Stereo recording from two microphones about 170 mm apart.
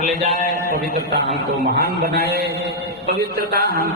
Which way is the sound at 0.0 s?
40° right (ahead or behind).